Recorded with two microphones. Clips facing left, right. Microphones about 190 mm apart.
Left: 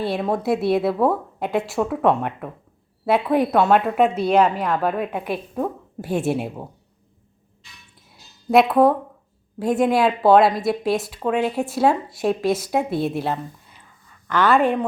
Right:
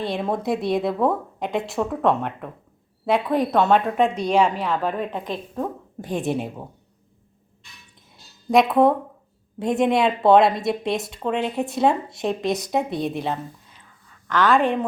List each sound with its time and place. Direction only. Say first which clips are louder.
0.0 s a woman's voice: left 2 dB; 5° left (ahead or behind)
8.4 s speech: left 1 dB; centre (ahead or behind)